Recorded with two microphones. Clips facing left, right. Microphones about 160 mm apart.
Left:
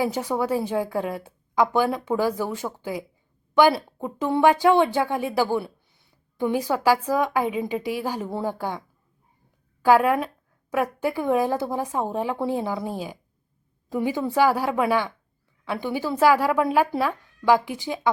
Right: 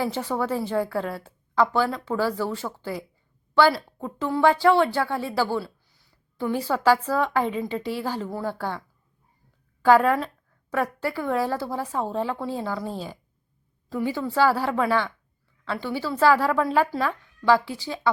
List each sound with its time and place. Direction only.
0.0 s speech: 15° left (ahead or behind)
9.8 s a sound: 10° left (ahead or behind)
11.0 s speech: 15° left (ahead or behind)